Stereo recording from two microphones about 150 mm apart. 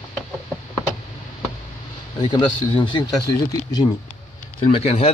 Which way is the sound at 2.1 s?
30° left (ahead or behind).